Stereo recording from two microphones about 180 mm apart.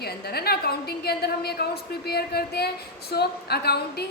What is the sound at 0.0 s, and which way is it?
A woman's voice, 60° left (ahead or behind).